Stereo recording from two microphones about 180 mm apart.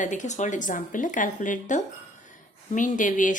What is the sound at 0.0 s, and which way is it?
A woman's voice, 45° left (ahead or behind).